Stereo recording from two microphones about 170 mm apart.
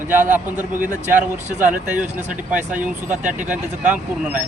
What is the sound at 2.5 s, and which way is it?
Speech, 10° right (ahead or behind).